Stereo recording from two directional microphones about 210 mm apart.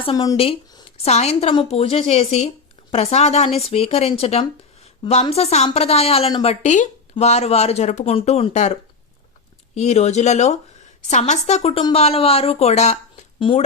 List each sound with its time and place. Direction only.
0.0 s a woman's voice: 20° left (ahead or behind)